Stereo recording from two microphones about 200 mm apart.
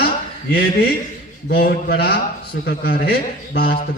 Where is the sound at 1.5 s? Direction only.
50° left (ahead or behind).